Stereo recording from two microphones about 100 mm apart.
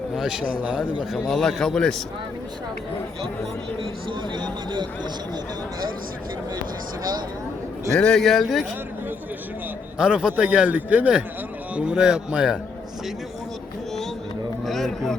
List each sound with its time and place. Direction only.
0.2 s a man's voice: 5° right (ahead or behind)
1.2 s speech: 5° left (ahead or behind)
4.1 s speech: 50° right (ahead or behind)
7.9 s speech: 5° left (ahead or behind)
10.0 s speech: 10° right (ahead or behind)
14.6 s speech: centre (ahead or behind)